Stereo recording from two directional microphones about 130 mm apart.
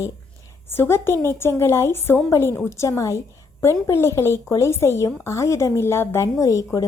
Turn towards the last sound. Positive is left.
turn(degrees=25)  # may be behind; listen again after turning